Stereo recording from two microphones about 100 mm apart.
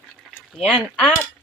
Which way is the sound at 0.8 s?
10° left (ahead or behind).